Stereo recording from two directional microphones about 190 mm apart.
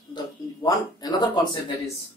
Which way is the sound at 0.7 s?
20° left (ahead or behind).